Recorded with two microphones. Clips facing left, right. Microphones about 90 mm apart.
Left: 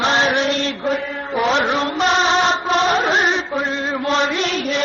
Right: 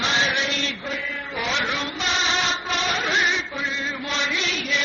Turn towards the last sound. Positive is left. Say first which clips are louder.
# left 6 dB
turn(degrees=45)  # may be behind; listen again after turning